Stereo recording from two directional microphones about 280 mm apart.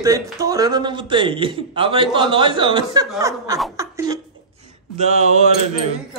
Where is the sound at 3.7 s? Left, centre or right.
Centre.